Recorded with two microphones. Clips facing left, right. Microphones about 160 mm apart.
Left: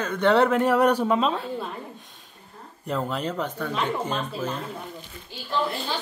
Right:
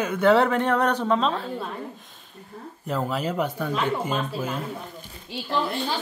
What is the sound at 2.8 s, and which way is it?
Speech, 5° right (ahead or behind).